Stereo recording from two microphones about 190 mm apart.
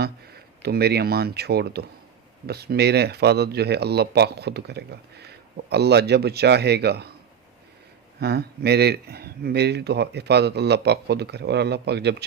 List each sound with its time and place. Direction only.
0.0 s speech: 55° right (ahead or behind)
8.2 s speech: 60° right (ahead or behind)